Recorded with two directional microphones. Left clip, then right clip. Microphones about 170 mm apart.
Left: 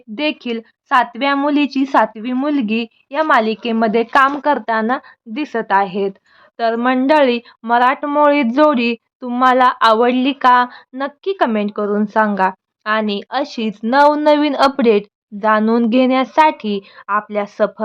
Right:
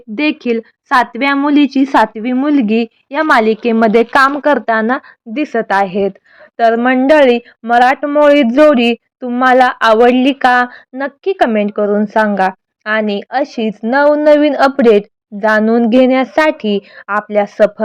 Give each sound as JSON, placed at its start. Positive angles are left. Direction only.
{"t": 0.2, "sound": "a woman's voice", "side_deg": -20}